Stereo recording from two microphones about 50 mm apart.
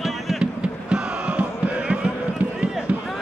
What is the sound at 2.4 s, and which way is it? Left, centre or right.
Run, right.